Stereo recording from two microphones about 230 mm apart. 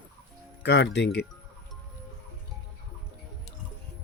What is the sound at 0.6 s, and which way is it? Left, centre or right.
Speech, left.